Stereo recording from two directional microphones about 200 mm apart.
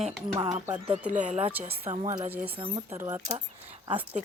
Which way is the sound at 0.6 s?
5° right (ahead or behind).